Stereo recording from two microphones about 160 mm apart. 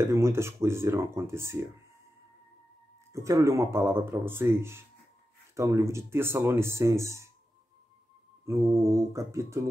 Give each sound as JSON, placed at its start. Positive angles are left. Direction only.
{"t": 0.0, "sound": "speech", "side_deg": -15}
{"t": 3.1, "sound": "speech", "side_deg": -20}
{"t": 8.5, "sound": "mantra", "side_deg": -20}